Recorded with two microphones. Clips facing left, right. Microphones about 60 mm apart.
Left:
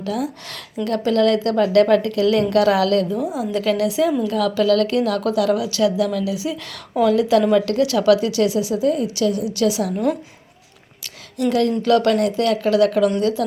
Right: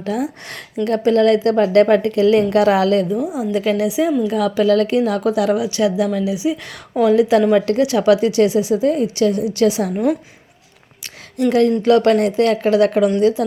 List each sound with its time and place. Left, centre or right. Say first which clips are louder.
0.0 s speech: right 2 dB; right
3.1 s a woman's voice: right 3 dB; centre; by 9.9 s right
11.0 s a sound: right 3 dB; right
11.8 s speech: right 3 dB; right